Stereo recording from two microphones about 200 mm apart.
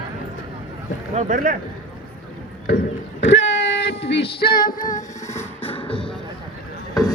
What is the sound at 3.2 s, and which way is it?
Female singing, 65° left (ahead or behind).